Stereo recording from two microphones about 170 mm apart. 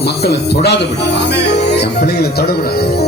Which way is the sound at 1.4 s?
85° left.